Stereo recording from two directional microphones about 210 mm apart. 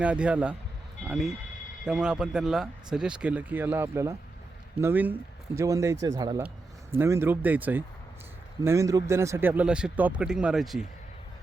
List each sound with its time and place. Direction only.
0.0 s speech: 5° right (ahead or behind)